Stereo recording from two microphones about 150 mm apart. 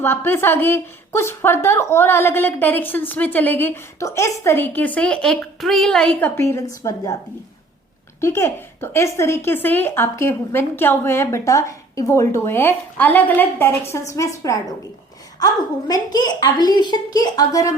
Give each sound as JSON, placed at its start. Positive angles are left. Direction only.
{"t": 0.0, "sound": "a woman's voice", "side_deg": 15}
{"t": 8.2, "sound": "a woman's voice", "side_deg": 15}